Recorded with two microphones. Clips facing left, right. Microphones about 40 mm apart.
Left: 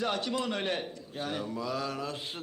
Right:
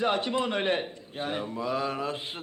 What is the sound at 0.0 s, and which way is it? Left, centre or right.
Mantra, right.